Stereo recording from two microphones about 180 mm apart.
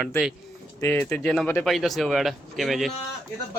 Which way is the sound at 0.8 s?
10° left (ahead or behind).